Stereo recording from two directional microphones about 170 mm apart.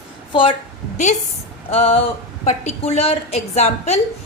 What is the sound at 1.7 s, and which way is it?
A woman's voice, 35° left (ahead or behind).